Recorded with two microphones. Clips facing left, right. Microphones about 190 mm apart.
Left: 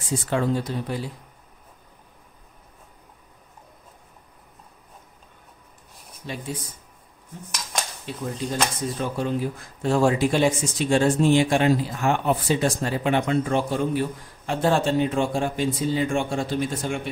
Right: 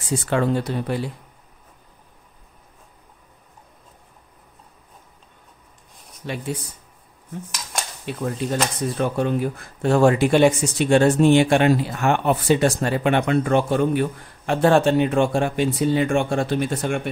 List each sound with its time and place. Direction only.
0.3 s speech: 65° right (ahead or behind)
6.2 s speech: 65° right (ahead or behind)
8.0 s speech: 60° right (ahead or behind)